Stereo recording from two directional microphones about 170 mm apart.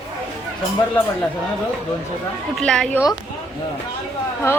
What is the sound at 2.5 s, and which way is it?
Speech, 5° left (ahead or behind).